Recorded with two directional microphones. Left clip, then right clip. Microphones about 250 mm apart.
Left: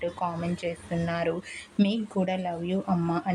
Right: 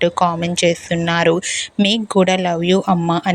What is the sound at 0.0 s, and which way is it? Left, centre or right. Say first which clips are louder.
Speech: right 14 dB; right.